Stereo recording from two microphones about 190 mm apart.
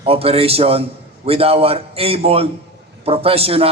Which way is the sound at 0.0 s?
30° right (ahead or behind).